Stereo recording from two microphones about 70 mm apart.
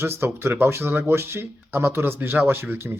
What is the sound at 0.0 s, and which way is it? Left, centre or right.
Speech, right.